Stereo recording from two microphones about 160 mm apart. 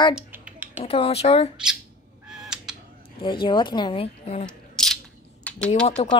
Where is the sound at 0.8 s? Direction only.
35° left (ahead or behind).